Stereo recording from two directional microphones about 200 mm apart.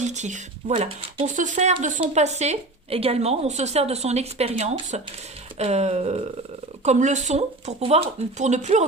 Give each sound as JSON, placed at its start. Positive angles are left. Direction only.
{"t": 0.0, "sound": "speech", "side_deg": -35}